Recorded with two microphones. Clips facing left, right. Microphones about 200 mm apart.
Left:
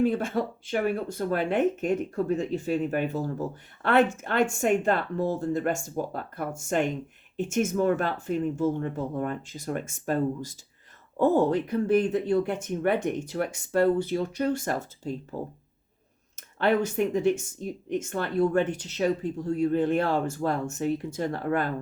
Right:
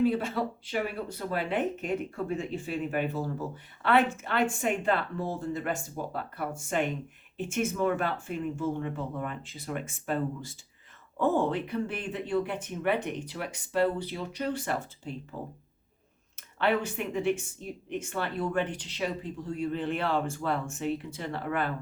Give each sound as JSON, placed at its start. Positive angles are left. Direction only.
{"t": 0.0, "sound": "speech", "side_deg": 50}
{"t": 16.3, "sound": "speech", "side_deg": 45}